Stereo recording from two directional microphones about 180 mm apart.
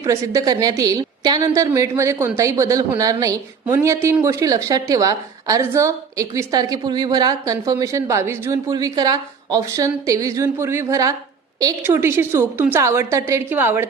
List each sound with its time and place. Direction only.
0.0 s a woman's voice: 20° right (ahead or behind)